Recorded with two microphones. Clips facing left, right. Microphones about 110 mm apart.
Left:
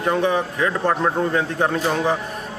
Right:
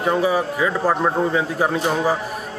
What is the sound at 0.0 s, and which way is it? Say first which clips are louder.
A man's voice: right 1 dB; 5° right (ahead or behind).